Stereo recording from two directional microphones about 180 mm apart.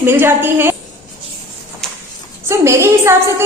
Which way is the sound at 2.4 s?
15° right (ahead or behind).